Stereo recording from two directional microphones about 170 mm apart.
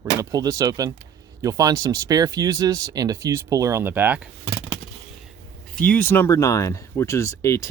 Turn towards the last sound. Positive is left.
turn(degrees=15)  # may be behind; listen again after turning